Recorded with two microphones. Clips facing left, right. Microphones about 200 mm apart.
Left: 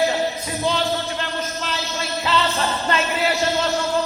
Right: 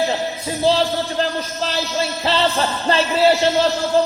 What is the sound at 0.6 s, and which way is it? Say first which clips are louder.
Music: right 5 dB; 35° right (ahead or behind).